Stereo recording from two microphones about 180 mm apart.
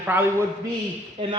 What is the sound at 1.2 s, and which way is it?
Speech, 30° right (ahead or behind).